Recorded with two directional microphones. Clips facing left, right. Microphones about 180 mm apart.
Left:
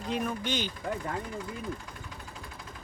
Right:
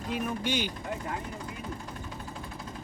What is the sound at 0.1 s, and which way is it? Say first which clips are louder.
Speech: right 1 dB; 10° right (ahead or behind).